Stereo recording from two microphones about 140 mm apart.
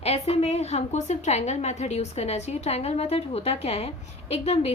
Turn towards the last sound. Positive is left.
turn(degrees=45)  # may be behind; listen again after turning